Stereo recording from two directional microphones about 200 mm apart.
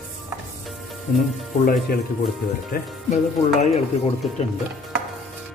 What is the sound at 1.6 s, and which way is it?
Speech, 45° left (ahead or behind).